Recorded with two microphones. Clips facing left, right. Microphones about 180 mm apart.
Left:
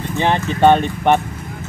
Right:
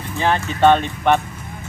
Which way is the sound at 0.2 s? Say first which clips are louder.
Left 2 dB; 15° left (ahead or behind).